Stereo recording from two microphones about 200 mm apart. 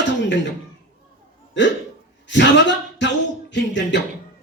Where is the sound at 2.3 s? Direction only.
65° left (ahead or behind).